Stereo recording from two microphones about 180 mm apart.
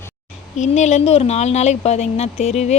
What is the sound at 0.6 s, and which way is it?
Speech, 40° left (ahead or behind).